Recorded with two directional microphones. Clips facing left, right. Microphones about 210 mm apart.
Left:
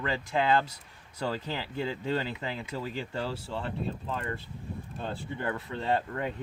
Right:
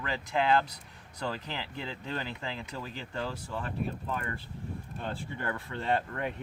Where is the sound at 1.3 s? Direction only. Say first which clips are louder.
Left 3 dB; 15° left (ahead or behind).